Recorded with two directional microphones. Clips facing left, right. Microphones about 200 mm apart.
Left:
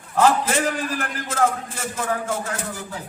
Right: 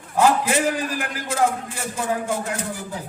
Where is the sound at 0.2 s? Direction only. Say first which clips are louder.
Even; 10° right (ahead or behind).